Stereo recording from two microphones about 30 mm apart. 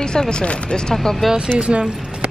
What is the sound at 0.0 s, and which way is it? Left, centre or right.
Speech, left.